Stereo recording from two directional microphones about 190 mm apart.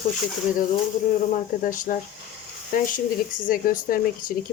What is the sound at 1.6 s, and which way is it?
Speech, 45° left (ahead or behind).